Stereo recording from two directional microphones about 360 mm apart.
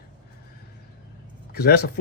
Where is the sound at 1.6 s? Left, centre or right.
Left.